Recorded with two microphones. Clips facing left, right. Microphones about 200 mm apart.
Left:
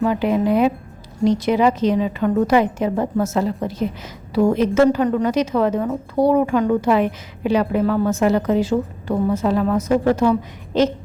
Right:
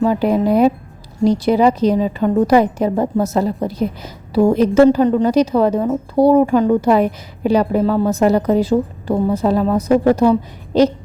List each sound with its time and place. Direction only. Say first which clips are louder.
0.0 s a woman's voice: right 3 dB; 40° right (ahead or behind)